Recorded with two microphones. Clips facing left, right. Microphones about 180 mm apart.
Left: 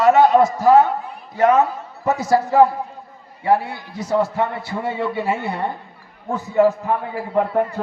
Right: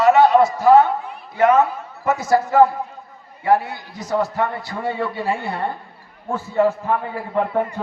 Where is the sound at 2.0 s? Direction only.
35° left (ahead or behind).